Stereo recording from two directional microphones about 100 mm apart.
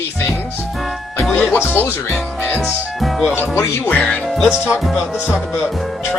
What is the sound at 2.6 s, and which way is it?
Speech, centre (ahead or behind).